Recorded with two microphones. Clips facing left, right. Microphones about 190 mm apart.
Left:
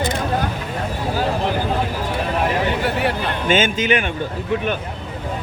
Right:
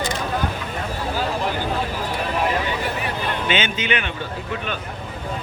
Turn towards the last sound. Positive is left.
turn(degrees=45)  # may be behind; listen again after turning